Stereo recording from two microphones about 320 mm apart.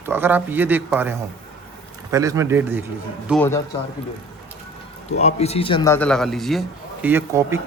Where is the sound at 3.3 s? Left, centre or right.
Centre.